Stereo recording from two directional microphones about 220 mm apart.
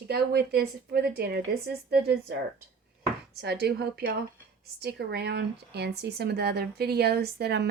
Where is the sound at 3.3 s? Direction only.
45° right (ahead or behind).